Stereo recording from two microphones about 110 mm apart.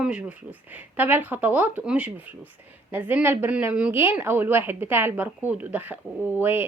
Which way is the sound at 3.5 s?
10° right (ahead or behind).